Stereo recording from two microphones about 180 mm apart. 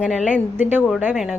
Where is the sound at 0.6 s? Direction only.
10° right (ahead or behind).